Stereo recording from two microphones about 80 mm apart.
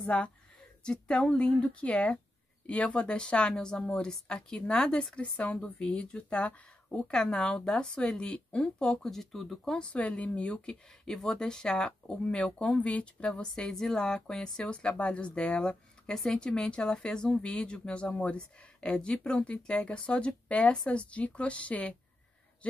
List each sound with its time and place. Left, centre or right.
0.0 s speech: centre
9.9 s speech: centre